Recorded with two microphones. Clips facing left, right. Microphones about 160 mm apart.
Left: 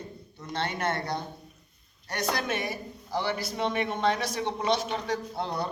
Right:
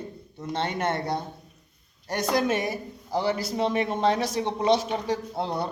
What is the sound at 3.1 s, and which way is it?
A man's voice, 25° right (ahead or behind).